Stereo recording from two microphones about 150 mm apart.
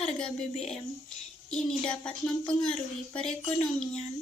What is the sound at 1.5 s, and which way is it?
Speech, 5° left (ahead or behind).